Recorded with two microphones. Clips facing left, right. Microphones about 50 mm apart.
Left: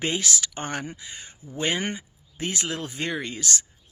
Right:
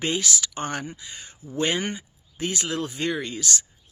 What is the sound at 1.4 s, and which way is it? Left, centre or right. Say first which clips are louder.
Speech: right 2 dB; centre.